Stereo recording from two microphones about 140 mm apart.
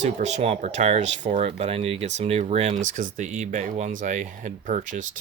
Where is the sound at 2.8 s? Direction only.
60° right (ahead or behind).